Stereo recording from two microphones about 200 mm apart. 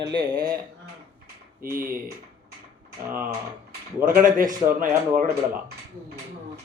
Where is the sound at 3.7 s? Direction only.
45° right (ahead or behind).